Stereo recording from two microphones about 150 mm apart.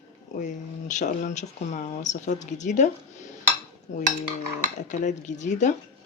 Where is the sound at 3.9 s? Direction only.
55° left (ahead or behind).